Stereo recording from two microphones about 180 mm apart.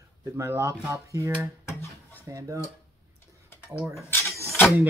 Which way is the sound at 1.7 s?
15° left (ahead or behind).